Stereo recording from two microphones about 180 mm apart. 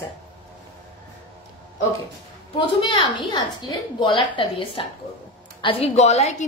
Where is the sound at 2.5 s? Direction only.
30° left (ahead or behind).